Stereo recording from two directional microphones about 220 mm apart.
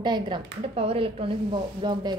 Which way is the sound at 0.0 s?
20° right (ahead or behind).